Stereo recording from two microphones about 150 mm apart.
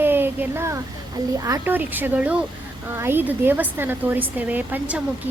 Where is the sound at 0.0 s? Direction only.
15° right (ahead or behind).